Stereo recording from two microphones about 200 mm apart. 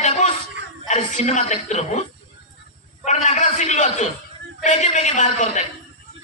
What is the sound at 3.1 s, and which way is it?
A man's voice, 35° left (ahead or behind).